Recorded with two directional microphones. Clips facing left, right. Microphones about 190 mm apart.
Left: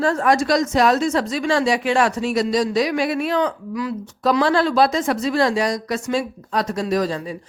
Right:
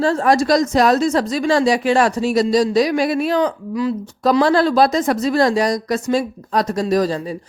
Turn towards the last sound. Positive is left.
turn(degrees=-35)  # may be behind; listen again after turning